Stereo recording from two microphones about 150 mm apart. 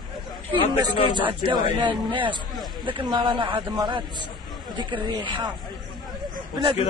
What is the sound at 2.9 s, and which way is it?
Speech, 30° right (ahead or behind).